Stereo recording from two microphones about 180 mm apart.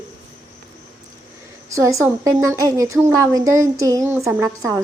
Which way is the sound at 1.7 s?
15° right (ahead or behind).